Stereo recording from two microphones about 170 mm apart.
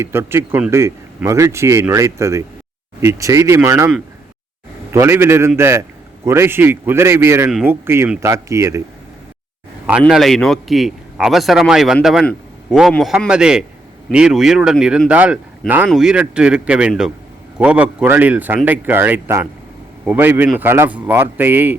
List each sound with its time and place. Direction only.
0.0 s speech: 15° right (ahead or behind)
10.1 s a man's voice: centre (ahead or behind)